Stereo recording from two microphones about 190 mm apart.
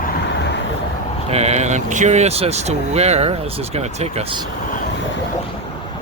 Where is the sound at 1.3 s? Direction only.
35° right (ahead or behind).